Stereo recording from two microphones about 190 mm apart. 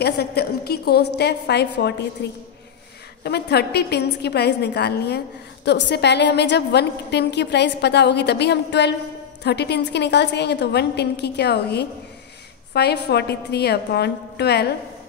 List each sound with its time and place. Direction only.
0.0 s a woman's voice: 55° left (ahead or behind)